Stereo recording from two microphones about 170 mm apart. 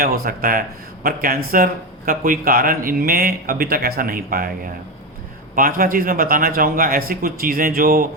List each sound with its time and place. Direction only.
0.0 s a man's voice: 60° right (ahead or behind)